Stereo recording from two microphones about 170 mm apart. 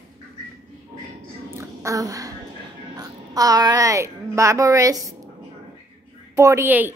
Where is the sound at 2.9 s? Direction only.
20° right (ahead or behind).